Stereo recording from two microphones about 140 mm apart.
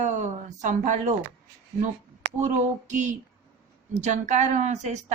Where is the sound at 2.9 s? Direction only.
60° right (ahead or behind).